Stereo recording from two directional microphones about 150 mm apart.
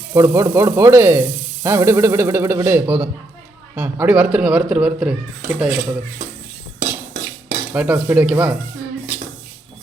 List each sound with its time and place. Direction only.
0.1 s sizzle: 20° right (ahead or behind); by 5.7 s 5° right (ahead or behind)
7.7 s sizzle: 10° right (ahead or behind)